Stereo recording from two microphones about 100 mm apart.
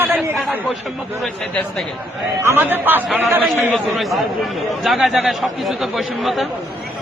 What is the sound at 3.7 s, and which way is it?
Speech, centre (ahead or behind).